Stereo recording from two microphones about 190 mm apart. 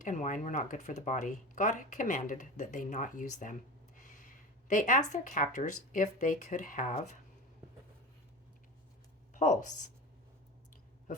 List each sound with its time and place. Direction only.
0.0 s speech: 40° left (ahead or behind)
9.3 s speech: 40° left (ahead or behind)